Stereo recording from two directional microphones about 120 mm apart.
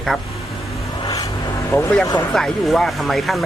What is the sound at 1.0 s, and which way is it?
Vehicle, 30° left (ahead or behind).